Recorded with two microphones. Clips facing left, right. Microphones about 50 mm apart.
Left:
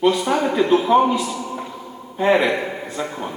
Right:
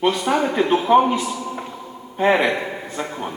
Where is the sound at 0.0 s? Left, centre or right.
Centre.